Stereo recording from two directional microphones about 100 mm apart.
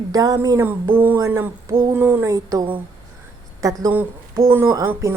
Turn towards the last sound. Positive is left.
turn(degrees=-35)  # may be behind; listen again after turning